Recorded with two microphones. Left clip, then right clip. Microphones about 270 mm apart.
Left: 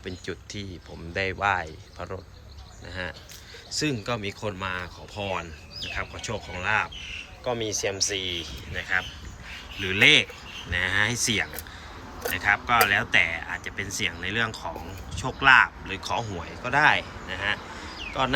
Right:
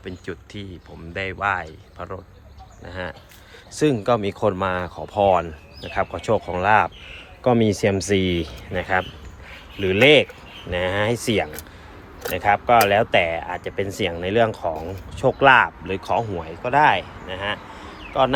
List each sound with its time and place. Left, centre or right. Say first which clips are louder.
0.0 s speech: right 2 dB; centre